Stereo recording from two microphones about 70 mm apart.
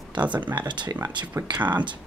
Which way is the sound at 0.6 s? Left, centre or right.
Right.